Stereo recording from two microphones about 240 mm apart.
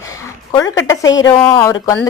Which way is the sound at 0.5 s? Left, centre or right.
Centre.